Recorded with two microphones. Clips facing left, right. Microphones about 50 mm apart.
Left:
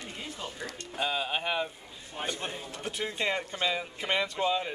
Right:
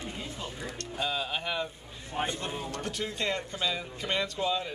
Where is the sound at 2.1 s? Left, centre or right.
Right.